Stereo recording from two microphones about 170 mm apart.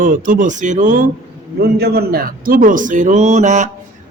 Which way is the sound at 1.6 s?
70° right (ahead or behind).